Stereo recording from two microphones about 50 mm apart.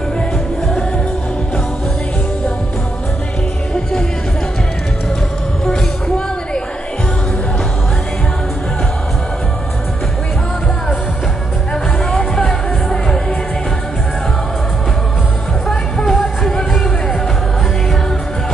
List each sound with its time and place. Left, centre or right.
5.7 s music: centre
11.7 s music: centre
15.7 s music: centre